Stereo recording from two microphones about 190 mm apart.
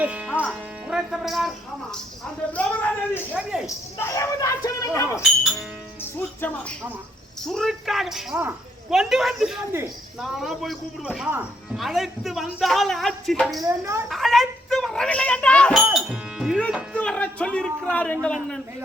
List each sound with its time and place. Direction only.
0.0 s speech: 5° right (ahead or behind)
3.7 s speech: 15° left (ahead or behind)
5.4 s music: 5° right (ahead or behind)
6.0 s speech: 10° left (ahead or behind)
13.6 s speech: 15° right (ahead or behind)
14.1 s speech: centre (ahead or behind)
15.8 s music: 5° right (ahead or behind)
16.6 s speech: centre (ahead or behind)